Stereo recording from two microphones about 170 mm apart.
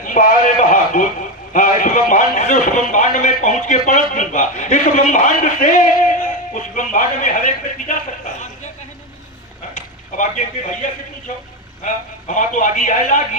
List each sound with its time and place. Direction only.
0.0 s a man's voice: 50° left (ahead or behind)
9.7 s a sound: 50° left (ahead or behind)
11.8 s a man's voice: 50° left (ahead or behind)